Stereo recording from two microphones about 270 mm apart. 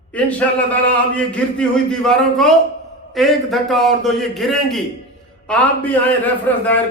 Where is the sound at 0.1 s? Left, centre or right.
Centre.